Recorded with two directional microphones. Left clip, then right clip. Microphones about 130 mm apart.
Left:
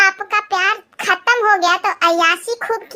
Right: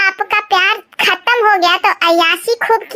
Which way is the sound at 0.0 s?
25° right (ahead or behind).